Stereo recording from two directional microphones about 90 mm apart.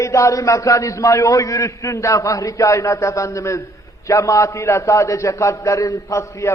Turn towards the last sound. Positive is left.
turn(degrees=35)  # may be behind; listen again after turning